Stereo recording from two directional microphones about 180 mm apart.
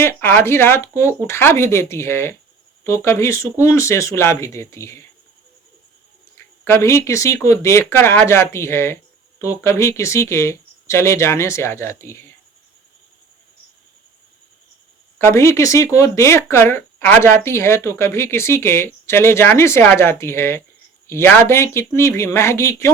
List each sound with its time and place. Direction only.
0.0 s speech: 15° left (ahead or behind)
6.3 s speech: 15° left (ahead or behind)
15.2 s speech: 15° left (ahead or behind)